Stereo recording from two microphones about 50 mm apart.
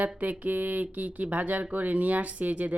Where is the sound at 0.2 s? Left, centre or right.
Right.